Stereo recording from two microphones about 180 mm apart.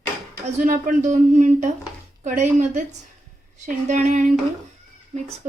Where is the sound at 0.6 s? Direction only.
45° right (ahead or behind).